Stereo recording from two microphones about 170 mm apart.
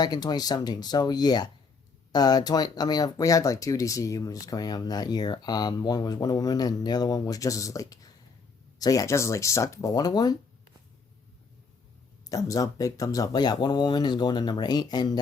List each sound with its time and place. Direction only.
0.0 s speech: 25° left (ahead or behind)
12.3 s speech: 20° left (ahead or behind)